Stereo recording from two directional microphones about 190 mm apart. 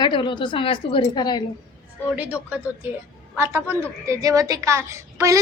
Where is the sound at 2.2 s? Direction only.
10° right (ahead or behind).